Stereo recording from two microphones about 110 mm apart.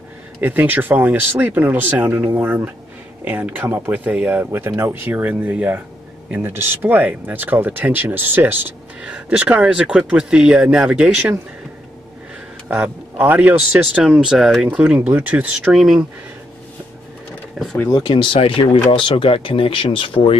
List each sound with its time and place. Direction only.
0.4 s speech: 15° right (ahead or behind)
12.6 s speech: 10° right (ahead or behind)
17.6 s speech: centre (ahead or behind)
17.9 s speech: 50° left (ahead or behind)